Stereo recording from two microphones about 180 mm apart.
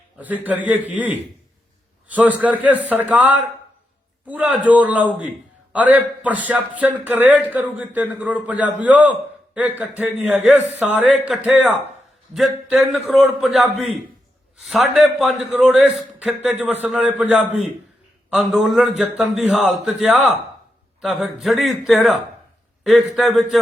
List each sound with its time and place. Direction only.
0.2 s a man's voice: 10° right (ahead or behind)